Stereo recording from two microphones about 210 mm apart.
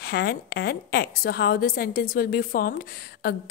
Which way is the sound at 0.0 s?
50° left (ahead or behind).